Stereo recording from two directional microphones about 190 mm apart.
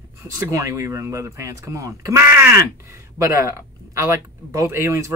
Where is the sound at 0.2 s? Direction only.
15° right (ahead or behind).